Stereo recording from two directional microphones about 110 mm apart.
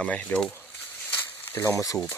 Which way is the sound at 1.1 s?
15° left (ahead or behind).